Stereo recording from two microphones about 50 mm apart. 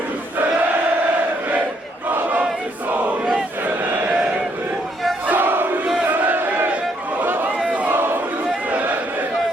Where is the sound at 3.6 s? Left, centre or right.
Right.